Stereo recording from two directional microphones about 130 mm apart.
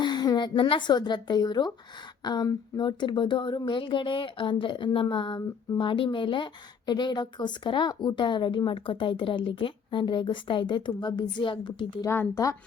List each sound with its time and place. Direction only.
0.0 s speech: 35° left (ahead or behind)
12.0 s speech: 20° left (ahead or behind)